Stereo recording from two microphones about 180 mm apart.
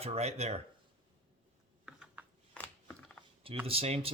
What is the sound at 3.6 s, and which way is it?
Speech, 35° right (ahead or behind).